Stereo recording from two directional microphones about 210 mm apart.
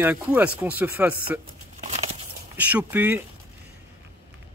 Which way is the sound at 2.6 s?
5° right (ahead or behind).